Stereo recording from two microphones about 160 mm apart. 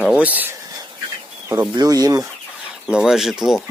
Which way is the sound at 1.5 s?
25° right (ahead or behind).